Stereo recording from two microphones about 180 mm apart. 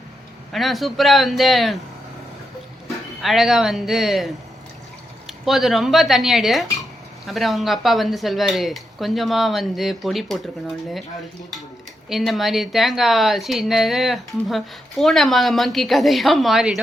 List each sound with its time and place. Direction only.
0.5 s a woman's voice: centre (ahead or behind)
3.2 s a woman's voice: centre (ahead or behind)
12.0 s a woman's voice: centre (ahead or behind)